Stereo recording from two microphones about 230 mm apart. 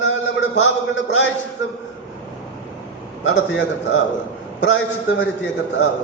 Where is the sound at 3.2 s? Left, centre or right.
Left.